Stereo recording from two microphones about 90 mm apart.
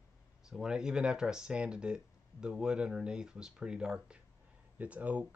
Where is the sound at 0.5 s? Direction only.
10° right (ahead or behind).